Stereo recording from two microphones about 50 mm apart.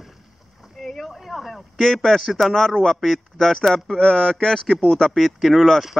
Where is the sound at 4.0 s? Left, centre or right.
Centre.